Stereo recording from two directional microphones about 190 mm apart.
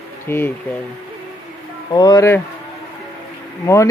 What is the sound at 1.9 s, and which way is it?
Speech, 20° left (ahead or behind).